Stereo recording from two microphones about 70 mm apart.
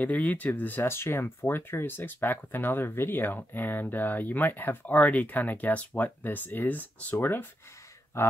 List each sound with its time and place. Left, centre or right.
0.0 s speech: left
0.8 s speech: left